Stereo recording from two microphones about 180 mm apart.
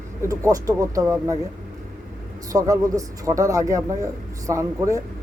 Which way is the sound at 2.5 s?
20° right (ahead or behind).